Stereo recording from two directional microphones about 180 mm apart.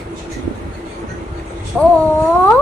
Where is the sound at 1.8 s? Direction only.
Centre (ahead or behind).